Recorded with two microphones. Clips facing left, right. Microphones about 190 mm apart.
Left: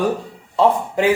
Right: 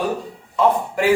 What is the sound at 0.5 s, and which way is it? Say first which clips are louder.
Speech: left 2 dB; 20° left (ahead or behind).